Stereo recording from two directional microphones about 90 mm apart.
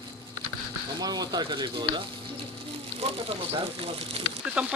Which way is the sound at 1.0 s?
45° right (ahead or behind).